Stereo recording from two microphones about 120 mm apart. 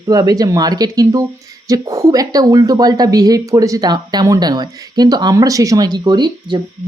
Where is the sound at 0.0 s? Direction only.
30° right (ahead or behind).